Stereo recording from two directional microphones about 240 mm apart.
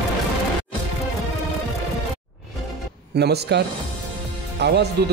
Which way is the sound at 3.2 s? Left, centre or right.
Right.